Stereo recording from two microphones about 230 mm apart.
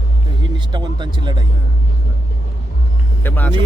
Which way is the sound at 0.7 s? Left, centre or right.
Centre.